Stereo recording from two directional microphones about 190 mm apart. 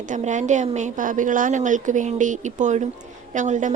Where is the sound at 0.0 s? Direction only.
40° right (ahead or behind).